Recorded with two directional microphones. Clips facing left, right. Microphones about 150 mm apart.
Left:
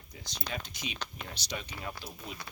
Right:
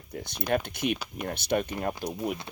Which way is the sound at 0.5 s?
60° right (ahead or behind).